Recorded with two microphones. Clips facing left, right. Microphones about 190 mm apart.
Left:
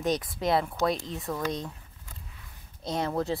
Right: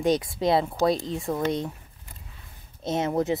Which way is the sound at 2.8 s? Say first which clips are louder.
Right 4 dB; 20° right (ahead or behind).